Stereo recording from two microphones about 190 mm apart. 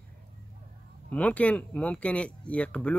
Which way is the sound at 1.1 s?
5° left (ahead or behind).